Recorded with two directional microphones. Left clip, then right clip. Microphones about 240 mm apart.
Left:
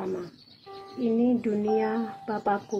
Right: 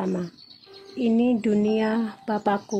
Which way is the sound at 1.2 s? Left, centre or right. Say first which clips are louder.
Right 3 dB; right.